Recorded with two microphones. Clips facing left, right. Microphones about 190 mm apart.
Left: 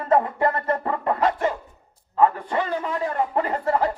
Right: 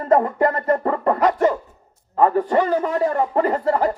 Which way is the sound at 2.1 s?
45° right (ahead or behind).